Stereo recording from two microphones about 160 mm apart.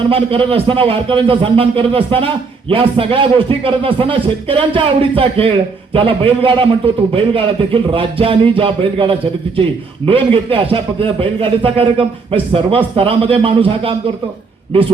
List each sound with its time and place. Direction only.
0.1 s a man's voice: 35° right (ahead or behind)